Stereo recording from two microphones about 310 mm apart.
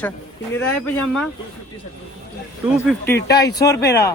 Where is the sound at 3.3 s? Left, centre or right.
Left.